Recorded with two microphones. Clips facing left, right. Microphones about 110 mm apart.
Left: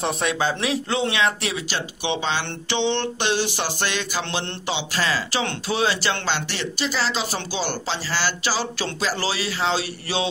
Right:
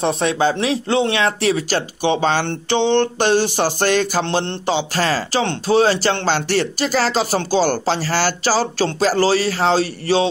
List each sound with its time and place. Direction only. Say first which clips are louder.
0.0 s speech: right 6 dB; 30° right (ahead or behind)
1.2 s speech: right 6 dB; 40° right (ahead or behind)